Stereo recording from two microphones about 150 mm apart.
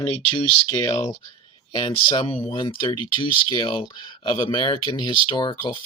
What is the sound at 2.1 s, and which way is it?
Speech, 40° left (ahead or behind).